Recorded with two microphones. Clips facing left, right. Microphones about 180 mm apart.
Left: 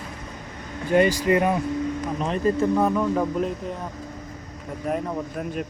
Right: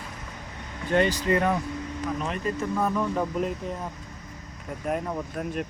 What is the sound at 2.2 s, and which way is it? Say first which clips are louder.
Speech: left 6 dB; 35° left (ahead or behind).